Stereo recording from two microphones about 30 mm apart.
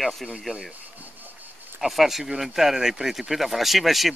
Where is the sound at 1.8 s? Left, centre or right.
Centre.